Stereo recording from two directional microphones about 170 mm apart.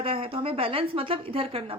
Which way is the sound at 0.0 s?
35° right (ahead or behind).